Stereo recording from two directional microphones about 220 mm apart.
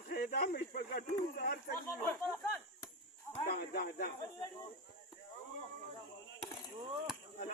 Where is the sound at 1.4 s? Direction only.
40° left (ahead or behind).